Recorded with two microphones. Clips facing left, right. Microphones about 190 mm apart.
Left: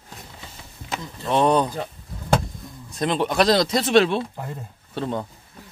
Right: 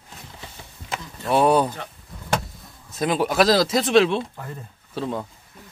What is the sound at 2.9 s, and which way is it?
Speech, 5° right (ahead or behind).